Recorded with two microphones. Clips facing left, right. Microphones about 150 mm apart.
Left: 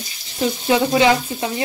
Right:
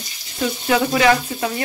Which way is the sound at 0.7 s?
25° left (ahead or behind).